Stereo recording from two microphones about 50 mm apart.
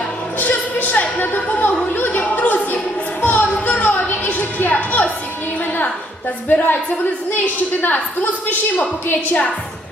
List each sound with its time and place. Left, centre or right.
0.3 s music: left
1.2 s a sound: left
1.5 s music: left
6.5 s a woman's voice: left